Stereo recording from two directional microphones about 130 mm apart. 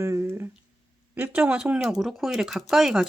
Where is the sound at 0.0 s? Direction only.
20° right (ahead or behind).